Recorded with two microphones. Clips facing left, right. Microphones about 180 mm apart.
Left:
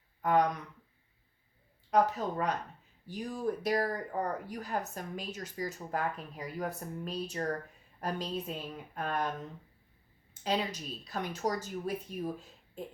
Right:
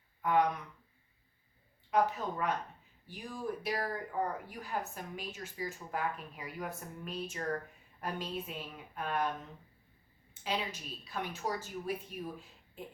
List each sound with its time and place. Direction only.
0.2 s speech: 40° left (ahead or behind)
1.9 s speech: 40° left (ahead or behind)
10.4 s speech: 40° left (ahead or behind)